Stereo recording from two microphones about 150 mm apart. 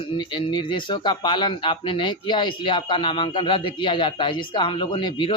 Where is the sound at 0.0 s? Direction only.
30° left (ahead or behind).